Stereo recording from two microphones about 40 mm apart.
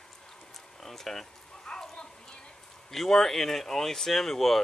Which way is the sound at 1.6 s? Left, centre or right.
Centre.